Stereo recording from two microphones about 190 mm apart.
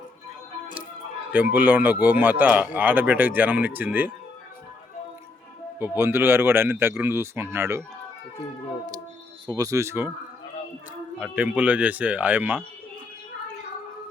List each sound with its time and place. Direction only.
1.3 s a man's voice: 10° right (ahead or behind)
5.8 s a man's voice: 10° right (ahead or behind)
9.5 s a man's voice: 20° right (ahead or behind)
11.2 s a man's voice: 5° right (ahead or behind)